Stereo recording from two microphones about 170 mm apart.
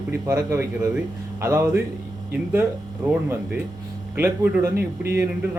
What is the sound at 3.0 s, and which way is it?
Speech, 10° right (ahead or behind).